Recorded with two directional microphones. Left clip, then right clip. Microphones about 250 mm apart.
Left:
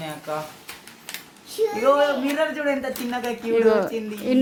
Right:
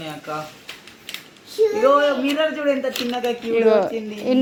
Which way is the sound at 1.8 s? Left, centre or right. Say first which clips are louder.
Right 1 dB; centre.